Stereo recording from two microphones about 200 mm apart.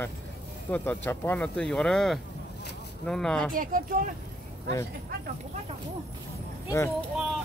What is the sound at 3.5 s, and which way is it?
Speech, 45° right (ahead or behind).